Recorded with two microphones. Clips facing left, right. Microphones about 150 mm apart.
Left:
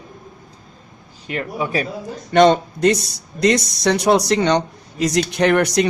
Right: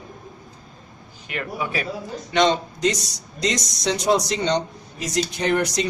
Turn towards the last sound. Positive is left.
turn(degrees=65)  # may be behind; listen again after turning